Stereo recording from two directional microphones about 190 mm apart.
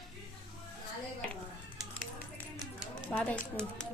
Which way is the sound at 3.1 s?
5° left (ahead or behind).